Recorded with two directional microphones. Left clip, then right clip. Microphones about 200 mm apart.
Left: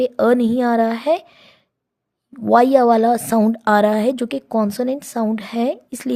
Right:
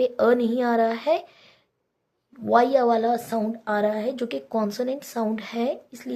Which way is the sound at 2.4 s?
45° left (ahead or behind).